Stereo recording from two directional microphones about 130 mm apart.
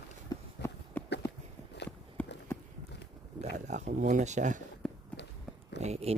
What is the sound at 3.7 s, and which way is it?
Speech, 65° right (ahead or behind).